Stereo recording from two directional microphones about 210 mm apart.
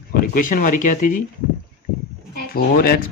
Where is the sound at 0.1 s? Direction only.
40° left (ahead or behind).